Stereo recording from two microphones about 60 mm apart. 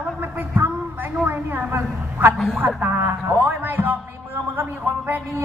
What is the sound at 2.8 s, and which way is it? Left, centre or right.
A man's voice, right.